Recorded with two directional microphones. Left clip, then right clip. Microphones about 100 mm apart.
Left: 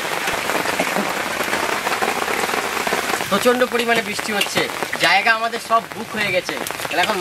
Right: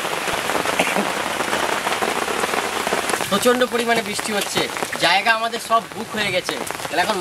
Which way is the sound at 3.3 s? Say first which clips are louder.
Left 1 dB; 10° right (ahead or behind).